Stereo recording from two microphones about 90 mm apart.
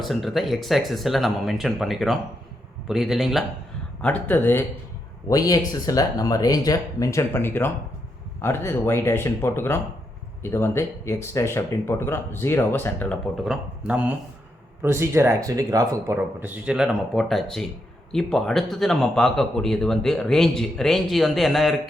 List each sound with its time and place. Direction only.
0.0 s speech: centre (ahead or behind)
4.0 s speech: 20° left (ahead or behind)
5.3 s speech: 40° left (ahead or behind); by 13.1 s 25° left (ahead or behind)
13.3 s speech: centre (ahead or behind)
13.8 s speech: 15° right (ahead or behind)
14.8 s speech: 30° right (ahead or behind)
15.4 s speech: 40° right (ahead or behind)
16.4 s speech: 10° right (ahead or behind)